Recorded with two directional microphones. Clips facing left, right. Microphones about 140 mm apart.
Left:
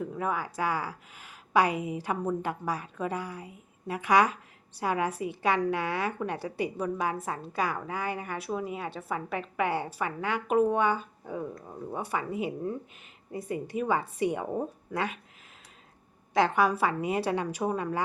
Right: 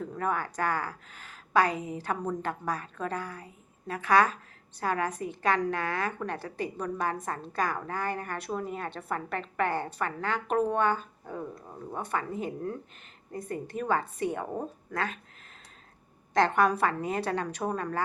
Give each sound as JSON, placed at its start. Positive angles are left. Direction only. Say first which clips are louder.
{"t": 0.0, "sound": "a woman's voice", "louder": "even", "side_deg": 5}
{"t": 16.3, "sound": "a woman's voice", "louder": "even", "side_deg": 5}